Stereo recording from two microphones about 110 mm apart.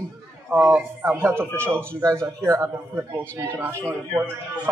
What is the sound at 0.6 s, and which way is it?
A man's voice, 15° right (ahead or behind).